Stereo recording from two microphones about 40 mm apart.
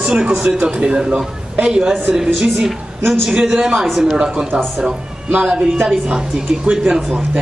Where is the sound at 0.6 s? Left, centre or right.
Right.